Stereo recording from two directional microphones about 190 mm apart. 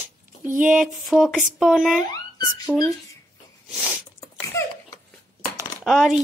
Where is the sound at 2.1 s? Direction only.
20° left (ahead or behind).